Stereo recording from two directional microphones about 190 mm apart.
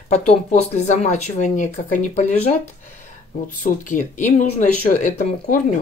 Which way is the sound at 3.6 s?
40° left (ahead or behind).